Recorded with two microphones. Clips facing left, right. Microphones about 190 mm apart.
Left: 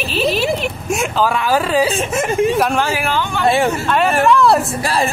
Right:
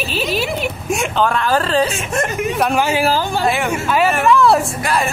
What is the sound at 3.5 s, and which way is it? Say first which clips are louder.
Speech: left 6 dB; 30° left (ahead or behind).